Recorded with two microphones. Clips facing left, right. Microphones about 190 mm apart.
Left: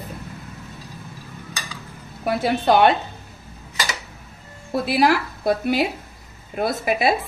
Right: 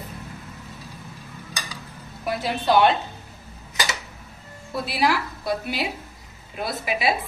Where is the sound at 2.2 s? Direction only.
55° left (ahead or behind).